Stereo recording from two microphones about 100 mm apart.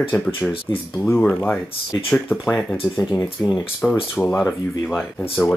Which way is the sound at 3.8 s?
15° left (ahead or behind).